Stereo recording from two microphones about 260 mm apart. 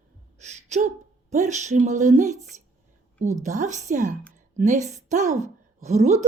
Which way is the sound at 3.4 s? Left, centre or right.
Right.